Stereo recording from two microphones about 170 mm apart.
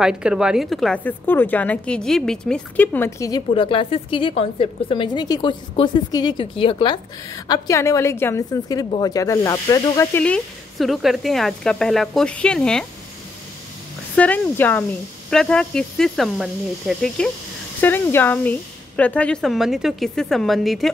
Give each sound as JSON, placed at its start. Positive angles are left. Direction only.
{"t": 0.0, "sound": "a woman's voice", "side_deg": -5}
{"t": 3.5, "sound": "a woman's voice", "side_deg": 30}
{"t": 10.2, "sound": "a woman's voice", "side_deg": 5}
{"t": 14.1, "sound": "a woman's voice", "side_deg": 10}
{"t": 17.7, "sound": "a woman's voice", "side_deg": 10}